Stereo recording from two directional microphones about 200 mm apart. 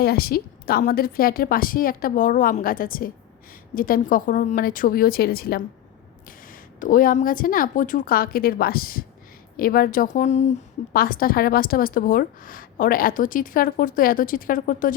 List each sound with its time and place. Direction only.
0.0 s a woman's voice: 50° left (ahead or behind)
6.7 s a woman's voice: 45° left (ahead or behind)
10.9 s a woman's voice: 45° left (ahead or behind)